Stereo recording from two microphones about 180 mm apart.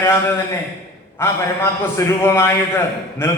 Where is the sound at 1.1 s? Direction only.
15° left (ahead or behind).